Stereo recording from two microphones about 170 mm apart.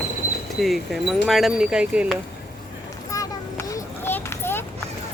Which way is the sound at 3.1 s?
20° left (ahead or behind).